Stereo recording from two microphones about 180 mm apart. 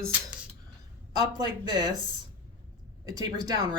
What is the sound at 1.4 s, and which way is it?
Speech, 25° right (ahead or behind).